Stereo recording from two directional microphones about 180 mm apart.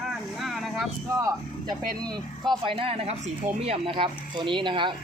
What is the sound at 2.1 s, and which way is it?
Speech, 25° right (ahead or behind).